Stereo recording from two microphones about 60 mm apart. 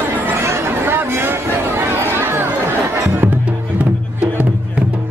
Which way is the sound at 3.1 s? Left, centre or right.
Right.